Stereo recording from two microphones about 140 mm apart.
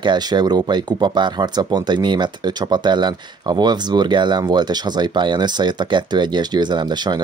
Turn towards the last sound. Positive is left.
turn(degrees=-30)  # may be behind; listen again after turning